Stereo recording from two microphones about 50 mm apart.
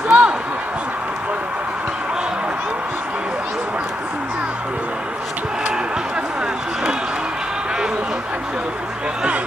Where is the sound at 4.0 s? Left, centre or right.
Right.